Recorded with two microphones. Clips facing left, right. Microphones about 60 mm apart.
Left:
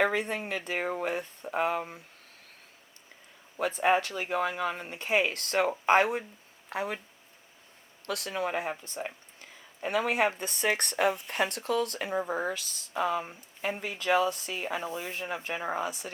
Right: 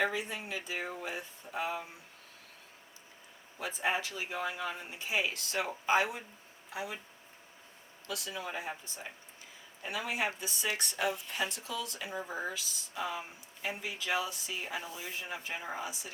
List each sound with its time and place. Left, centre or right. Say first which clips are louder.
0.0 s speech: left 6 dB; left
3.6 s speech: left 8 dB; left
8.0 s speech: left 8 dB; left